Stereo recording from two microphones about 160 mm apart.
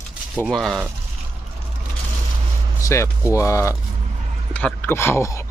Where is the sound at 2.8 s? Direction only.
20° left (ahead or behind).